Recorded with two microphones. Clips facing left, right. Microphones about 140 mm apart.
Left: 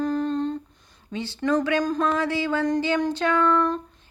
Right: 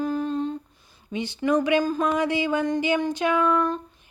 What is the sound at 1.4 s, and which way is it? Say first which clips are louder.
Speech: right 1 dB; 10° right (ahead or behind).